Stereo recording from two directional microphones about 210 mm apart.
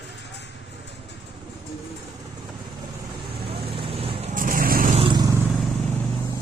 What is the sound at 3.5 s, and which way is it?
Vehicle, 25° right (ahead or behind).